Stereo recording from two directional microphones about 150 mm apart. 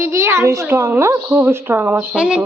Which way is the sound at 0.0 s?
20° right (ahead or behind).